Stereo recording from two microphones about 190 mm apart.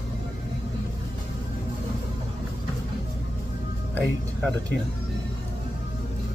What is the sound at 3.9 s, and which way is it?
Music, 5° left (ahead or behind).